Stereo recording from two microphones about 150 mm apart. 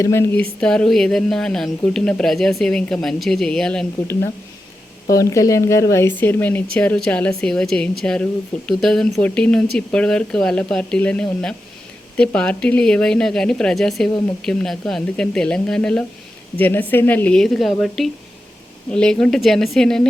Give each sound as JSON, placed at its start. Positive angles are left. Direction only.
{"t": 0.0, "sound": "speech", "side_deg": 15}
{"t": 0.6, "sound": "a woman's voice", "side_deg": 5}
{"t": 4.0, "sound": "a woman's voice", "side_deg": 15}